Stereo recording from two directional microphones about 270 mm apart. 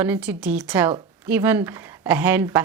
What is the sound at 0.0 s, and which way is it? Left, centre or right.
Speech, centre.